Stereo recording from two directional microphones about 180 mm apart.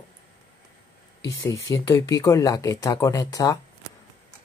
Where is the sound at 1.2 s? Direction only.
15° left (ahead or behind).